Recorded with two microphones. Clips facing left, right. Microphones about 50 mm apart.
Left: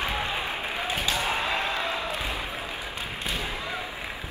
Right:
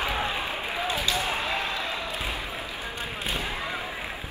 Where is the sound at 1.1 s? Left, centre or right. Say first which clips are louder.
Left 1 dB; left.